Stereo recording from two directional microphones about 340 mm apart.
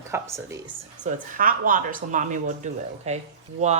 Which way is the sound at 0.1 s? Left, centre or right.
Centre.